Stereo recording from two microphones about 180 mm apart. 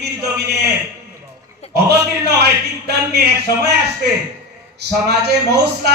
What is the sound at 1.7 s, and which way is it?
Speech, 65° right (ahead or behind).